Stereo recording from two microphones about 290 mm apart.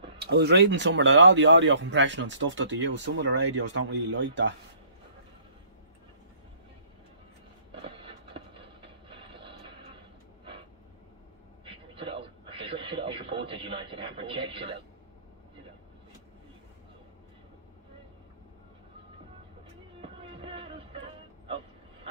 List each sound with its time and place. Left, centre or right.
0.2 s speech: right
8.0 s music: centre
11.6 s radio: centre
20.0 s music: centre